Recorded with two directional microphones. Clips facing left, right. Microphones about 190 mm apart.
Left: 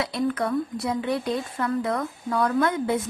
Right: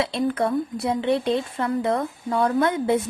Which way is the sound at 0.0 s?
25° right (ahead or behind).